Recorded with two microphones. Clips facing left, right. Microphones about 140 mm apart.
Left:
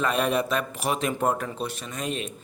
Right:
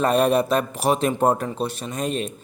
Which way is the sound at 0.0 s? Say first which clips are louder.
Right 6 dB; 35° right (ahead or behind).